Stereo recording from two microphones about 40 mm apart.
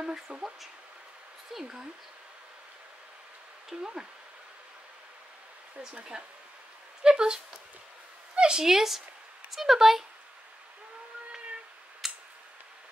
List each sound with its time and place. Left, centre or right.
0.0 s speech: centre
3.7 s speech: centre
5.8 s speech: right
8.6 s speech: centre
12.0 s a sound: centre